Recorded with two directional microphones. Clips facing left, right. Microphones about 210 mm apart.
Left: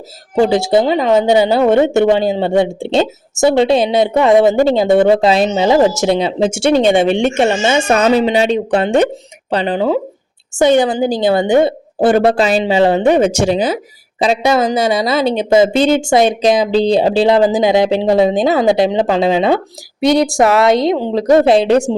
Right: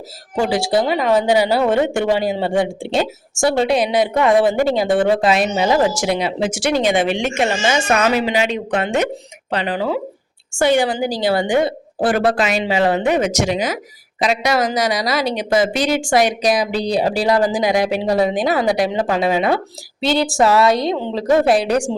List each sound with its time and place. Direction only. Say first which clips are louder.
0.5 s speech: left 5 dB; 25° left (ahead or behind)